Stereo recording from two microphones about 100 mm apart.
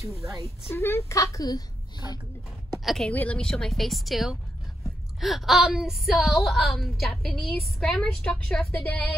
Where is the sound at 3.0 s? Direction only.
15° left (ahead or behind).